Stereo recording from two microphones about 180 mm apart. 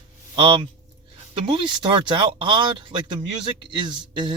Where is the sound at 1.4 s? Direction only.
30° right (ahead or behind).